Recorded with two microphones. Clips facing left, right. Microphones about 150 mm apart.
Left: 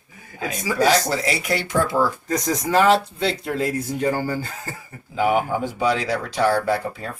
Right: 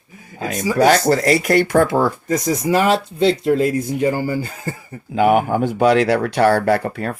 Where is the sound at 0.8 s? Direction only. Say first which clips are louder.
Right 5 dB; 55° right (ahead or behind).